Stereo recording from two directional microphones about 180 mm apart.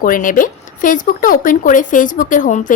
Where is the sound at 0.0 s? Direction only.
50° left (ahead or behind).